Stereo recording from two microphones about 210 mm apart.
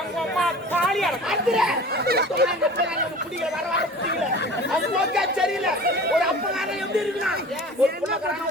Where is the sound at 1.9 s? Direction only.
50° right (ahead or behind).